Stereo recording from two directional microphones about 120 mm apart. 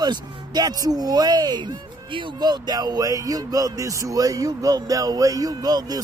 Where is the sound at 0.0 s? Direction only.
35° right (ahead or behind).